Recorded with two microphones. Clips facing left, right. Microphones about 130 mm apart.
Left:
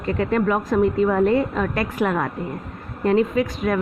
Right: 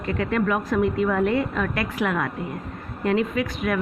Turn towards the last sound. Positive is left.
turn(degrees=30)  # may be behind; listen again after turning